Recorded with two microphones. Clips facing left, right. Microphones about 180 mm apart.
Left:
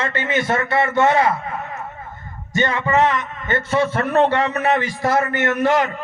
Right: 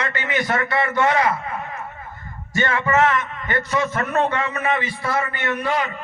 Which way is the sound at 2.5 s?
20° left (ahead or behind).